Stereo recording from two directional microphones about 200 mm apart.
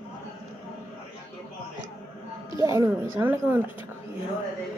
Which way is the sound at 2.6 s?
15° right (ahead or behind).